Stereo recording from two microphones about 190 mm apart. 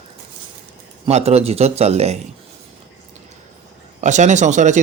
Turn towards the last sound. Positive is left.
turn(degrees=-40)  # may be behind; listen again after turning